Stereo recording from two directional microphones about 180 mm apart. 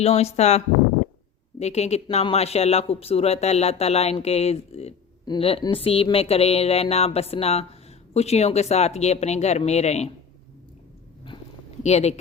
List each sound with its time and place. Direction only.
0.0 s speech: 35° left (ahead or behind)
11.8 s speech: 40° left (ahead or behind)